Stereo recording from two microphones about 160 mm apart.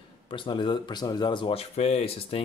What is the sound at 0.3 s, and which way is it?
Speech, 30° left (ahead or behind).